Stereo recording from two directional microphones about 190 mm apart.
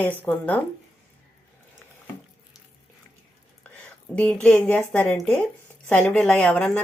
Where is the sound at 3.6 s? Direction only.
5° left (ahead or behind).